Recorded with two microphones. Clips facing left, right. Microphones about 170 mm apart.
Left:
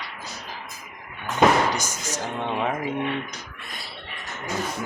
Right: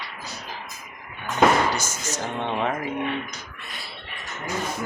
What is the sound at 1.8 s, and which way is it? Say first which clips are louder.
Speech: even; 10° left (ahead or behind).